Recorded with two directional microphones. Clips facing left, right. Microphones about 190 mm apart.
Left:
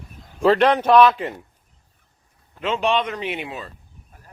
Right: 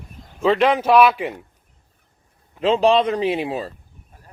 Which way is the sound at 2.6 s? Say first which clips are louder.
Right 6 dB; 35° right (ahead or behind).